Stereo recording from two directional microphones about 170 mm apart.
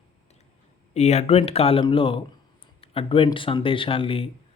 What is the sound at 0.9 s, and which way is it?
Speech, 40° left (ahead or behind).